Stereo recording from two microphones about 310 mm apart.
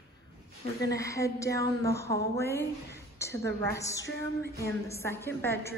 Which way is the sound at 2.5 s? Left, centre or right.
Centre.